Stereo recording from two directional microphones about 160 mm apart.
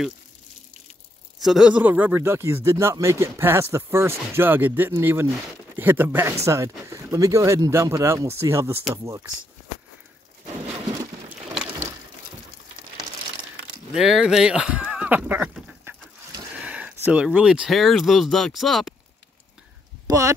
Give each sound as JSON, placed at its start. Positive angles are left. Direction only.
{"t": 1.4, "sound": "speech", "side_deg": -5}
{"t": 13.9, "sound": "speech", "side_deg": -5}
{"t": 15.8, "sound": "chicken", "side_deg": -15}
{"t": 20.1, "sound": "speech", "side_deg": -20}